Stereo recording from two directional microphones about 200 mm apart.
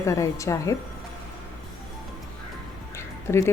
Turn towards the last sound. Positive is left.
turn(degrees=15)  # may be behind; listen again after turning